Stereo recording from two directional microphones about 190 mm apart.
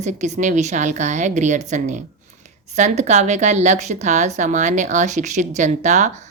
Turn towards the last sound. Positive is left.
turn(degrees=-40)  # may be behind; listen again after turning